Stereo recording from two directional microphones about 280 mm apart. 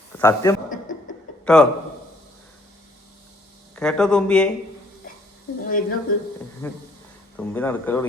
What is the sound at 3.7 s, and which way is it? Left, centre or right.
Speech, centre.